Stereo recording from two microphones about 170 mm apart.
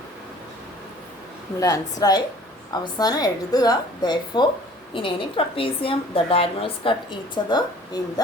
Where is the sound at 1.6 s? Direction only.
20° left (ahead or behind).